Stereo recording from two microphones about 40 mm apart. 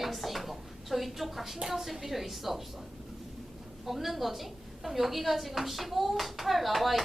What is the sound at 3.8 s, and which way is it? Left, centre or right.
A child's voice, centre.